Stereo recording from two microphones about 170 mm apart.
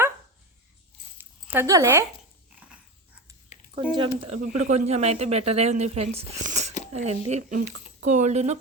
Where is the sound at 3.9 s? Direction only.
30° right (ahead or behind).